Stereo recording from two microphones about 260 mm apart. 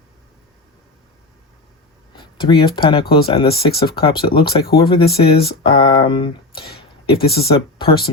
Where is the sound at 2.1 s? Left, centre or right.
Centre.